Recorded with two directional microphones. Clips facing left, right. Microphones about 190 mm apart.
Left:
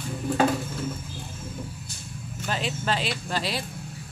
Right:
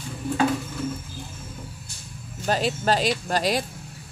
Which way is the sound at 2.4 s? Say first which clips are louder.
Right 6 dB; 40° right (ahead or behind).